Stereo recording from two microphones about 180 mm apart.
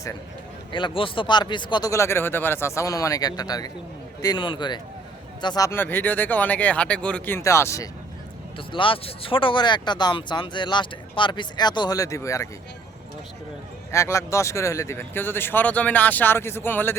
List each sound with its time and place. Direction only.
0.7 s speech: 25° left (ahead or behind)
8.5 s speech: 30° left (ahead or behind)
13.9 s speech: 15° left (ahead or behind)